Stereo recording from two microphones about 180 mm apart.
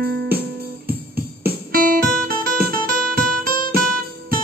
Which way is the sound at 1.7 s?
55° right (ahead or behind).